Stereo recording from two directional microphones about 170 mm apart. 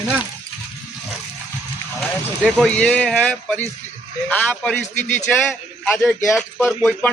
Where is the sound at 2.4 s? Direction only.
5° left (ahead or behind).